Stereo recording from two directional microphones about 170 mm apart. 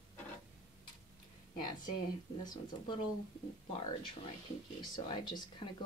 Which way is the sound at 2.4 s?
25° left (ahead or behind).